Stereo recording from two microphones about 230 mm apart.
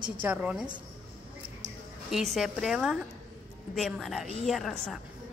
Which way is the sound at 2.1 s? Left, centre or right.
Centre.